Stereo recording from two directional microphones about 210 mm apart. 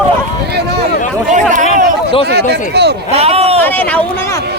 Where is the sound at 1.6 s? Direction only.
30° left (ahead or behind).